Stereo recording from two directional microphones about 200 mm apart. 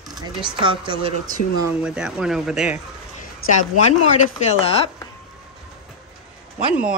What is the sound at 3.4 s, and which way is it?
Speech, 90° left.